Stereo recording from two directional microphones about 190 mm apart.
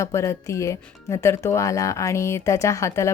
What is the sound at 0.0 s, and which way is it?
Speech, 15° left (ahead or behind).